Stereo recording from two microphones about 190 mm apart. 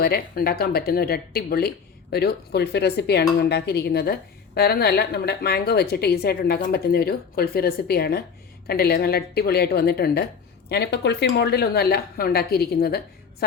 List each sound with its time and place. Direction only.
0.0 s speech: 55° left (ahead or behind)